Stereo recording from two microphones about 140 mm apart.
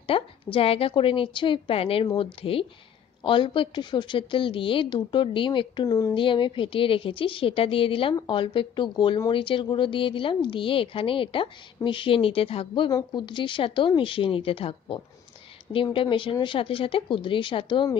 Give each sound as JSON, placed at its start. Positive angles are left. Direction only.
{"t": 0.0, "sound": "speech", "side_deg": 40}
{"t": 3.3, "sound": "speech", "side_deg": 35}